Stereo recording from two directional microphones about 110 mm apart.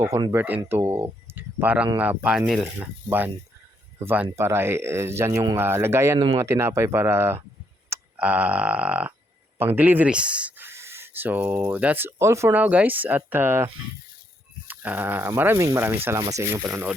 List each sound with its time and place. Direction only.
0.3 s speech: 20° right (ahead or behind)
3.1 s speech: 20° right (ahead or behind)
6.1 s speech: 40° right (ahead or behind)
6.4 s speech: 25° right (ahead or behind)
7.9 s a sound: 15° right (ahead or behind)
9.6 s speech: 15° right (ahead or behind)
12.5 s speech: 15° right (ahead or behind)
14.7 s speech: 15° right (ahead or behind)